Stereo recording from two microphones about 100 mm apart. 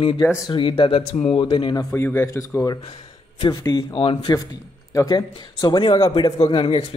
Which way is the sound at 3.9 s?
60° left (ahead or behind).